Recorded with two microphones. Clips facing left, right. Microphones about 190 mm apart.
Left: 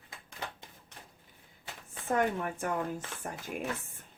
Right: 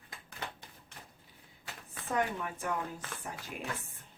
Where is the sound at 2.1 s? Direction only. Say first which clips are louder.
Left 4 dB; 50° left (ahead or behind).